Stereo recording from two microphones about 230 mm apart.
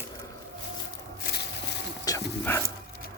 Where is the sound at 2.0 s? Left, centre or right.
Centre.